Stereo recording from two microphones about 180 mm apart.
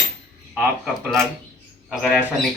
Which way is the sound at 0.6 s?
5° right (ahead or behind).